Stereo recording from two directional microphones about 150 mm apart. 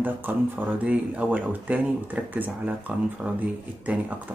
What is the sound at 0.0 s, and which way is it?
Speech, 15° right (ahead or behind).